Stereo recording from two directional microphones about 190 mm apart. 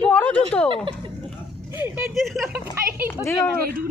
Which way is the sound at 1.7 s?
10° right (ahead or behind).